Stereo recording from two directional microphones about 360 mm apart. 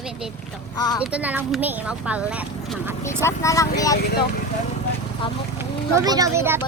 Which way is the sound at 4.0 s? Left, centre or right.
Left.